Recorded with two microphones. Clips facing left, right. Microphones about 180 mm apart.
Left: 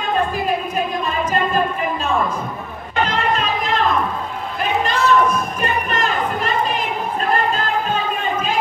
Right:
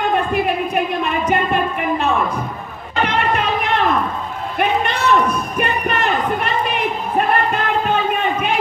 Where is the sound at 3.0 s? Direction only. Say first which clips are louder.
Right 3 dB; 65° right (ahead or behind).